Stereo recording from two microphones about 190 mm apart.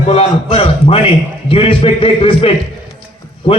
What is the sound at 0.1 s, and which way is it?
A man's voice, 30° left (ahead or behind).